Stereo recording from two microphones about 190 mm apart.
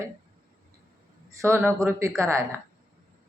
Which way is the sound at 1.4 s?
15° right (ahead or behind).